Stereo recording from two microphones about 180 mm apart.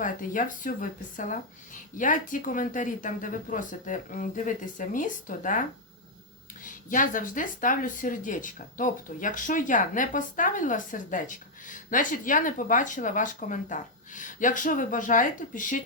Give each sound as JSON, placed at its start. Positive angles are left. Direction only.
{"t": 0.0, "sound": "speech", "side_deg": 45}
{"t": 6.7, "sound": "speech", "side_deg": 50}